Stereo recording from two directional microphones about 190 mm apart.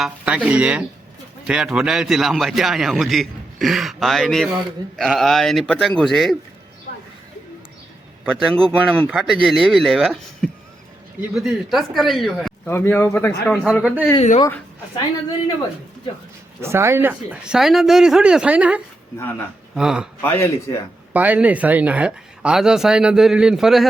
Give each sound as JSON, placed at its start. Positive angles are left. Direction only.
{"t": 0.0, "sound": "a man's voice", "side_deg": -5}
{"t": 8.2, "sound": "a man's voice", "side_deg": 0}
{"t": 12.6, "sound": "speech", "side_deg": 10}
{"t": 13.5, "sound": "a man's voice", "side_deg": 0}
{"t": 14.2, "sound": "speech", "side_deg": 35}
{"t": 14.4, "sound": "speech", "side_deg": 15}
{"t": 16.6, "sound": "a man's voice", "side_deg": -15}
{"t": 20.2, "sound": "speech", "side_deg": 10}
{"t": 21.1, "sound": "a man's voice", "side_deg": -10}